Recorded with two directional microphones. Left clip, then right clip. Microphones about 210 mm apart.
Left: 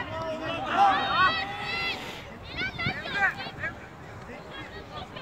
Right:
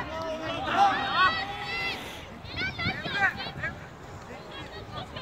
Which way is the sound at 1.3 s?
40° left (ahead or behind).